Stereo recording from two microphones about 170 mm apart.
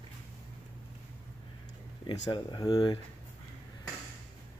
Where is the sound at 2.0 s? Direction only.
25° left (ahead or behind).